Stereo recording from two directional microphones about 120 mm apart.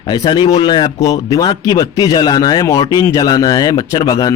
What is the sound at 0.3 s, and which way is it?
A man's voice, 40° left (ahead or behind).